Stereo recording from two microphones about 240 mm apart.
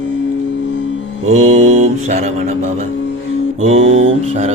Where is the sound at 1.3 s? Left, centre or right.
Right.